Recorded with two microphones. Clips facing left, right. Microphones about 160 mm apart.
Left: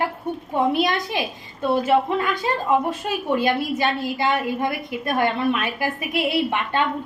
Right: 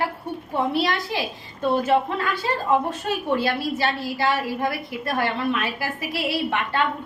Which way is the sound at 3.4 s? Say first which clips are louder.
Left 2 dB; 15° left (ahead or behind).